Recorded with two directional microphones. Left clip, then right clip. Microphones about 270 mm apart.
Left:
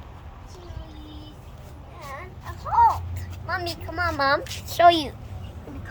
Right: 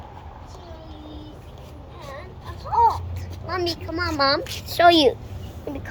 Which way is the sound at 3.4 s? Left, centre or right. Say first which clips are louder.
Right 3 dB; centre.